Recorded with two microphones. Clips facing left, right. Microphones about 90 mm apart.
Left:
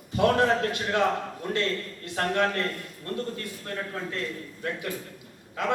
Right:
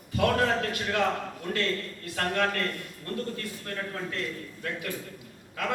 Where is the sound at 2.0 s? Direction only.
25° left (ahead or behind).